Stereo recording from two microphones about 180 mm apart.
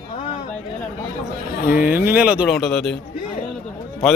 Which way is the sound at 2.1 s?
5° right (ahead or behind).